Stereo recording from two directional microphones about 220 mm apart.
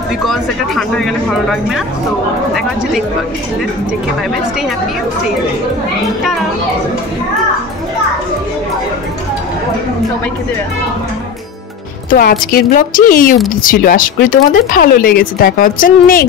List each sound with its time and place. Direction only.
0.2 s speech: centre (ahead or behind)
12.1 s speech: 40° left (ahead or behind)